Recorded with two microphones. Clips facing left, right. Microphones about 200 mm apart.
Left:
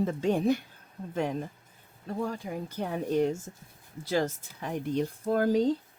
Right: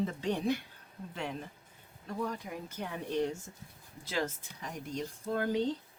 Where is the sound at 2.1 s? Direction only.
30° left (ahead or behind).